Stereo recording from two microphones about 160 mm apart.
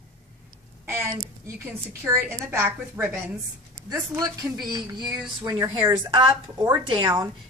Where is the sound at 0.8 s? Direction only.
15° right (ahead or behind).